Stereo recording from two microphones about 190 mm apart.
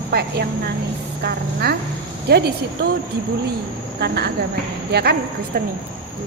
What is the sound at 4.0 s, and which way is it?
A woman's voice, 60° right (ahead or behind).